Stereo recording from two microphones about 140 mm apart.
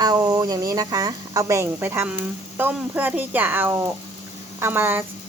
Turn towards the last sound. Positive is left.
turn(degrees=-15)  # may be behind; listen again after turning